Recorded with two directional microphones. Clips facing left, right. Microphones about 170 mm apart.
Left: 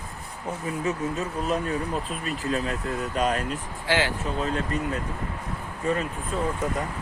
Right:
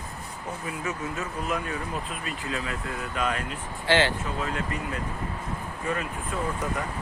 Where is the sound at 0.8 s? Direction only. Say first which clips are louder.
Left 5 dB; 35° left (ahead or behind).